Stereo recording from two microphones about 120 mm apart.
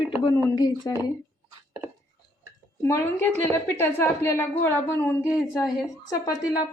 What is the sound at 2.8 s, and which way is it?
A woman's voice, 20° left (ahead or behind).